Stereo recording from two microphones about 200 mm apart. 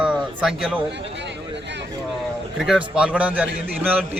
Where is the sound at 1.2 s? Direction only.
60° right (ahead or behind).